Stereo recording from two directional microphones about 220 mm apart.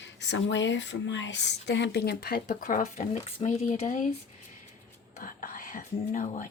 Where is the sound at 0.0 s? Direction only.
55° left (ahead or behind); by 4.1 s 35° left (ahead or behind).